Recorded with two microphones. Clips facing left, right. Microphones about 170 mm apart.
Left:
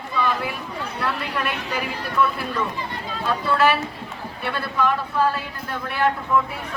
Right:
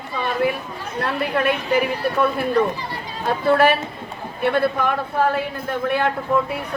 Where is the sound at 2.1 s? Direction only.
45° right (ahead or behind).